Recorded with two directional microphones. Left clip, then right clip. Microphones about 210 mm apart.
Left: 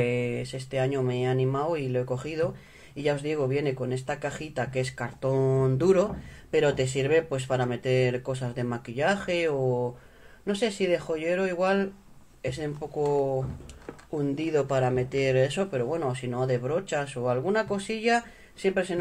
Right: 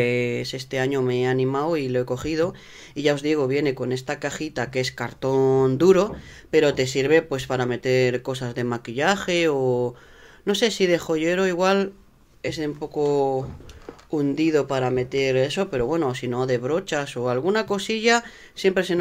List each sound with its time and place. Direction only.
0.0 s speech: 40° right (ahead or behind)
12.4 s speech: 25° right (ahead or behind)